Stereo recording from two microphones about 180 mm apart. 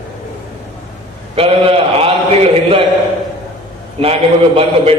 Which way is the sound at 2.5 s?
30° right (ahead or behind).